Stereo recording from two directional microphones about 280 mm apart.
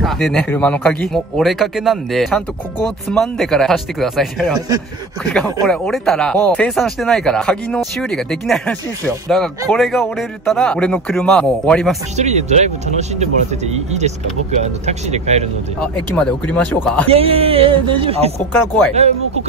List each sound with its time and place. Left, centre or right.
0.0 s speech: centre
4.6 s speech: centre
5.3 s speech: centre
12.2 s speech: right
15.8 s speech: centre
17.1 s speech: right